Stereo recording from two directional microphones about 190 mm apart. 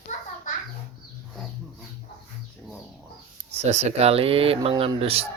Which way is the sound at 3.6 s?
35° right (ahead or behind).